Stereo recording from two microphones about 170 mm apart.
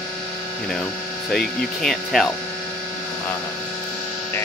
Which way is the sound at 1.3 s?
Centre (ahead or behind).